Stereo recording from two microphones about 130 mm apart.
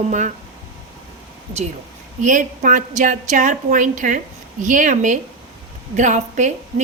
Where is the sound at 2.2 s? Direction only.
80° right.